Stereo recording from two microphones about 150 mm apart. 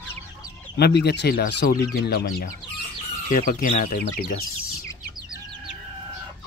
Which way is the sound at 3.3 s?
65° left (ahead or behind).